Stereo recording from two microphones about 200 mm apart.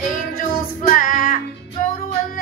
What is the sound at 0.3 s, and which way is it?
Music, 45° left (ahead or behind).